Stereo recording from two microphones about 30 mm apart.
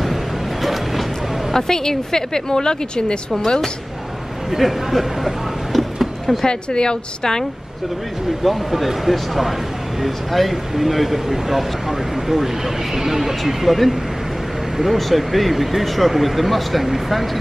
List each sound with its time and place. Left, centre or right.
0.0 s a sound: centre
1.6 s a woman's voice: centre
4.5 s a sound: centre
6.2 s a woman's voice: left
8.5 s speech: centre
15.0 s speech: centre